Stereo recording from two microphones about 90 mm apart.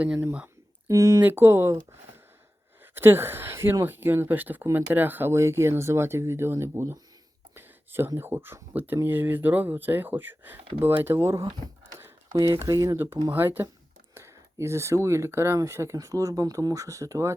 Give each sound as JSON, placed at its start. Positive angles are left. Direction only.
{"t": 0.9, "sound": "speech", "side_deg": -35}
{"t": 1.2, "sound": "speech", "side_deg": -25}
{"t": 2.9, "sound": "speech", "side_deg": -25}
{"t": 12.3, "sound": "speech", "side_deg": -45}
{"t": 13.3, "sound": "speech", "side_deg": -20}